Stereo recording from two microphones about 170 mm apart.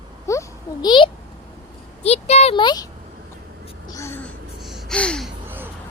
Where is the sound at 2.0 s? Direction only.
40° left (ahead or behind); by 5.3 s 5° left (ahead or behind).